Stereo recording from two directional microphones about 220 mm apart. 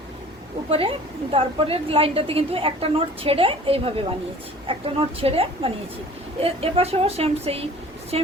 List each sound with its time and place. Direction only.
0.7 s a woman's voice: 25° right (ahead or behind)